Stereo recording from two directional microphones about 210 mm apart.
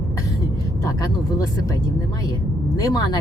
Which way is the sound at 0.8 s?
15° left (ahead or behind).